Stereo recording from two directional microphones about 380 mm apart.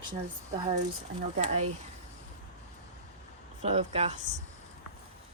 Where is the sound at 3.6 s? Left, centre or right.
Centre.